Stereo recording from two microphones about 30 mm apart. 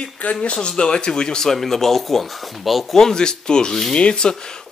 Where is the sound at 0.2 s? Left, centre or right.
Left.